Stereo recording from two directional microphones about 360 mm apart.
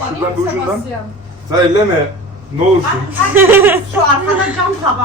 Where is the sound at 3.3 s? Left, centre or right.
Centre.